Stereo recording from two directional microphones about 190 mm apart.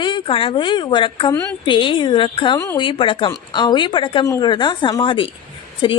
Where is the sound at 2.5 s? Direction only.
15° left (ahead or behind).